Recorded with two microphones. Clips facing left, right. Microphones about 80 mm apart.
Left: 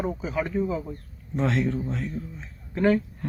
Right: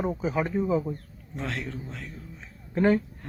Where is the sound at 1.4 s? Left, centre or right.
Centre.